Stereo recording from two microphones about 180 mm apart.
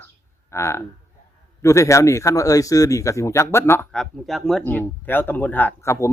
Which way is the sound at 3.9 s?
Centre (ahead or behind).